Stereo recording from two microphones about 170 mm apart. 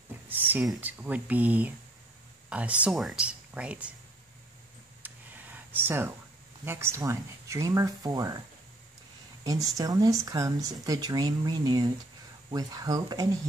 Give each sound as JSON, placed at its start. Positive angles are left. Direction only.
{"t": 0.3, "sound": "speech", "side_deg": -10}
{"t": 5.0, "sound": "a sound", "side_deg": -10}
{"t": 6.6, "sound": "speech", "side_deg": -15}
{"t": 9.4, "sound": "speech", "side_deg": -20}